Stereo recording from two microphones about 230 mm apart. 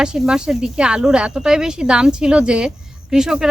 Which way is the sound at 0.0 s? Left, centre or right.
Centre.